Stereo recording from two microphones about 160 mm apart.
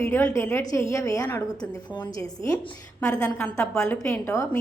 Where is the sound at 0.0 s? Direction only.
15° left (ahead or behind).